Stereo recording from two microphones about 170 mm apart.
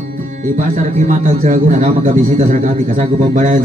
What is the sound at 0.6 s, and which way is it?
A man's voice, 50° right (ahead or behind).